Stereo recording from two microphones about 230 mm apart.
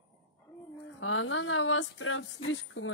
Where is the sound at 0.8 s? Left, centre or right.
Left.